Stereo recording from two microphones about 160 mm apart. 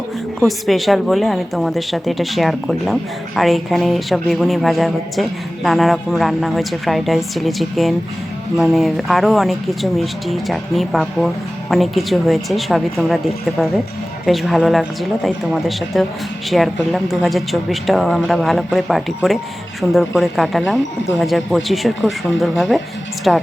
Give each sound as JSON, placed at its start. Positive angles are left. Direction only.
{"t": 0.3, "sound": "a woman's voice", "side_deg": 0}
{"t": 14.3, "sound": "a woman's voice", "side_deg": 0}